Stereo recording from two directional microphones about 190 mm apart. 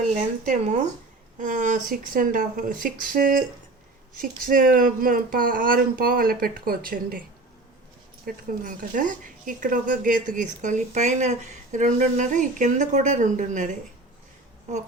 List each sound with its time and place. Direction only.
0.1 s speech: 40° right (ahead or behind)
8.2 s speech: 45° right (ahead or behind)
14.7 s speech: 40° right (ahead or behind)